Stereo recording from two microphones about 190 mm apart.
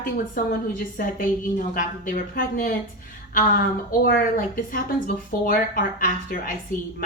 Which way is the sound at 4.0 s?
50° left (ahead or behind).